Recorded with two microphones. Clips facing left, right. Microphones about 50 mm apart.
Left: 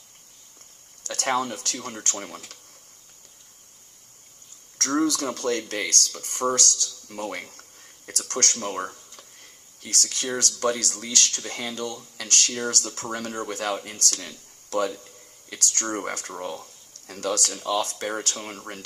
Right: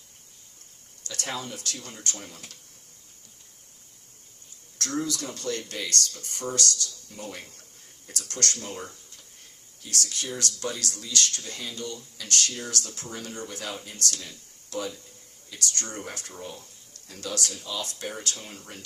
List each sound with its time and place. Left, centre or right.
1.0 s speech: left
4.8 s speech: left